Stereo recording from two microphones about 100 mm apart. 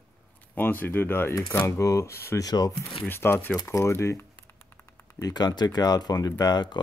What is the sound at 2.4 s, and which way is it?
Speech, 40° left (ahead or behind).